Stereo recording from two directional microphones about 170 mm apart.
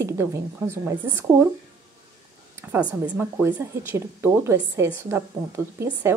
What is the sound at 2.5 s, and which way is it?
A woman's voice, 10° right (ahead or behind).